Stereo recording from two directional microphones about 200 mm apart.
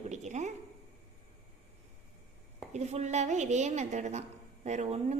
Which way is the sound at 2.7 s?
35° right (ahead or behind).